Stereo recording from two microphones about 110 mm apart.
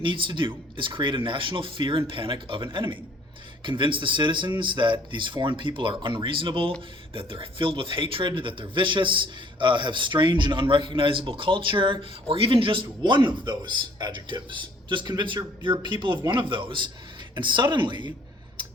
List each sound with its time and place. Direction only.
0.0 s a man's voice: 45° right (ahead or behind)